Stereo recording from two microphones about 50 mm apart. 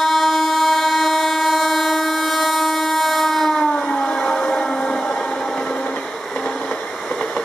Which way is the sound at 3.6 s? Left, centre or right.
Centre.